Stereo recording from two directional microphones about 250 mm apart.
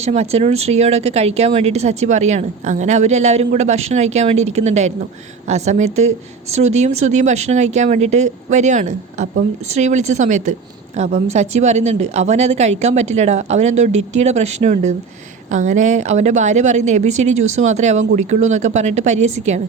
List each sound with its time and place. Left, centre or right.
0.0 s speech: right